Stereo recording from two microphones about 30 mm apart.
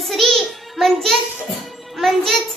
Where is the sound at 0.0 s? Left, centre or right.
Centre.